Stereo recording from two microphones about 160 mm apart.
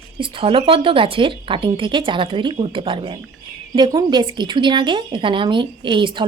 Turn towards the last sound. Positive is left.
turn(degrees=-30)  # may be behind; listen again after turning